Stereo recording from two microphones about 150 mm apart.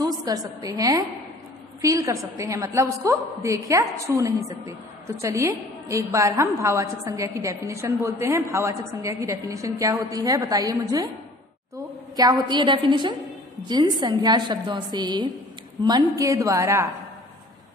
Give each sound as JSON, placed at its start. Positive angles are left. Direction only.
{"t": 0.2, "sound": "a woman's voice", "side_deg": -25}
{"t": 12.2, "sound": "a woman's voice", "side_deg": -30}